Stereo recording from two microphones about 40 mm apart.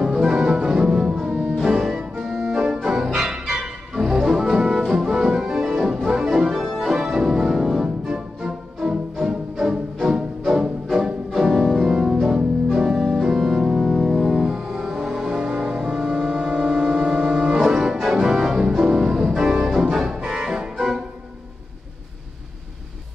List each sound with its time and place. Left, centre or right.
0.0 s music: centre
5.4 s organ: centre
6.6 s organ: centre
8.5 s music: right
11.9 s music: centre
13.2 s organ: centre
15.5 s foghorn: centre
18.1 s organ: centre
20.2 s music: centre